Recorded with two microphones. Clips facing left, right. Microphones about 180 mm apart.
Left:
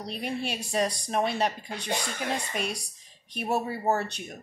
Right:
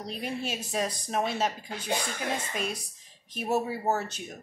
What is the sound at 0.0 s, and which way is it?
Speech, 65° left (ahead or behind).